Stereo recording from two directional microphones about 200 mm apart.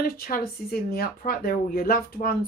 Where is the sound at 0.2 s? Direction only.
45° left (ahead or behind).